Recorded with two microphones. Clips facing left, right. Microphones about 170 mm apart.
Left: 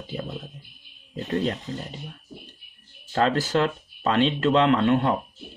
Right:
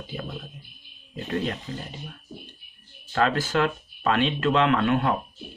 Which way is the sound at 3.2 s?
35° left (ahead or behind).